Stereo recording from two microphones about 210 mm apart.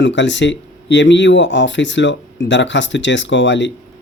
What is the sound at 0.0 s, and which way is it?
Speech, 60° left (ahead or behind).